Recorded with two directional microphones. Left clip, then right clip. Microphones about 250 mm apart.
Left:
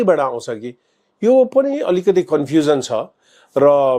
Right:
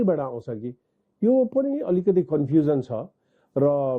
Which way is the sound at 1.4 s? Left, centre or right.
Centre.